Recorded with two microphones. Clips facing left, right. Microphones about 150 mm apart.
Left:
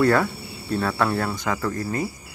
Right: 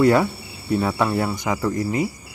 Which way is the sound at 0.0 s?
15° right (ahead or behind).